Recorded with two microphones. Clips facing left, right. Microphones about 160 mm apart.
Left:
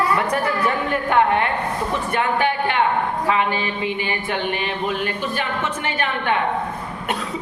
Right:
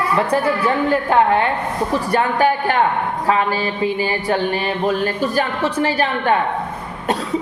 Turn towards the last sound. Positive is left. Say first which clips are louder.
# right 5 dB
turn(degrees=-35)  # may be behind; listen again after turning